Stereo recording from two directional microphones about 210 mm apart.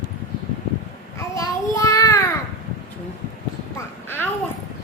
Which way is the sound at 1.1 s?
15° left (ahead or behind).